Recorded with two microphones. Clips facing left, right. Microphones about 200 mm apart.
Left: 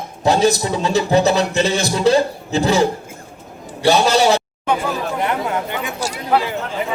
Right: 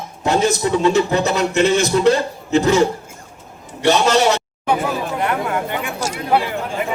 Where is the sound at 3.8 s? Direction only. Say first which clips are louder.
Even; 35° left (ahead or behind).